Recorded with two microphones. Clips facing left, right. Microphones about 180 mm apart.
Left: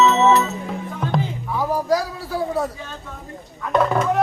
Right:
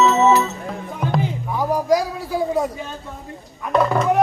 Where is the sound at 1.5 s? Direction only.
15° right (ahead or behind).